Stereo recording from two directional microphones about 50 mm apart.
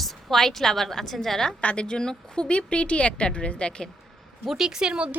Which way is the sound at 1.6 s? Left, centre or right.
Left.